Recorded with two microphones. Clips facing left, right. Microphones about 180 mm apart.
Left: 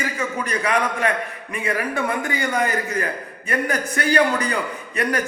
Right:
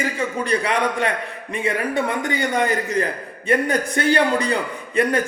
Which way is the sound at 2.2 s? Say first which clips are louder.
Right 2 dB; 25° right (ahead or behind).